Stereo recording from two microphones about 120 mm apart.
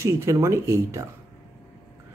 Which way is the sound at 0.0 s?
25° right (ahead or behind).